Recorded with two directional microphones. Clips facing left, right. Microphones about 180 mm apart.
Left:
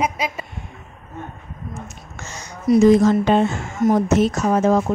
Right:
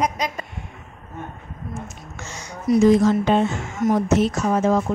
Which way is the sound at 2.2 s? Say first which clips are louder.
Left 1 dB; 45° left (ahead or behind).